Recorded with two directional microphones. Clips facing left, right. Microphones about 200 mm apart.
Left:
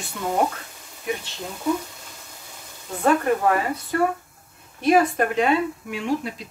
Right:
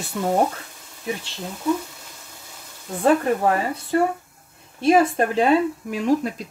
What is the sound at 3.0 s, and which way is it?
Speech, 30° right (ahead or behind).